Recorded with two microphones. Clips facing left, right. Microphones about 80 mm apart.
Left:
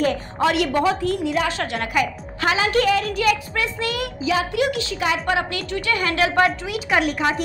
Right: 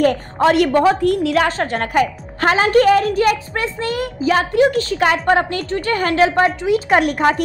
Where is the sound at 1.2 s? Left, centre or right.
Right.